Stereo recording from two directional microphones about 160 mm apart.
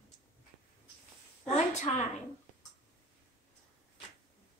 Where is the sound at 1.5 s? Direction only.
45° left (ahead or behind).